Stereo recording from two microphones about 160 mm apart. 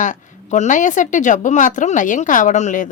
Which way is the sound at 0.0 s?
50° left (ahead or behind).